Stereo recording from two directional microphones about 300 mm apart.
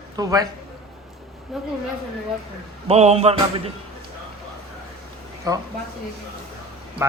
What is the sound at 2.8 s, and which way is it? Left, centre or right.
Speech, right.